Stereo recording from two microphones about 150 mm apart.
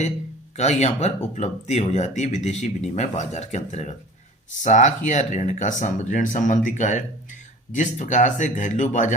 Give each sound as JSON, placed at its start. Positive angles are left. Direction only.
{"t": 0.5, "sound": "speech", "side_deg": 50}